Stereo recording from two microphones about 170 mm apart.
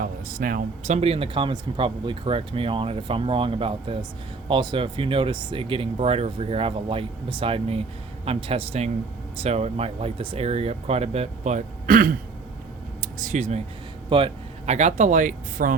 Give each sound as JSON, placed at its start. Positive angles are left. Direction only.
{"t": 0.0, "sound": "speech", "side_deg": -55}
{"t": 0.9, "sound": "speech", "side_deg": -35}
{"t": 14.1, "sound": "speech", "side_deg": -30}